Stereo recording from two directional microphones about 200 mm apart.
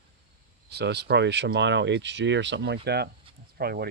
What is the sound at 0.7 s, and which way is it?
Speech, 55° right (ahead or behind).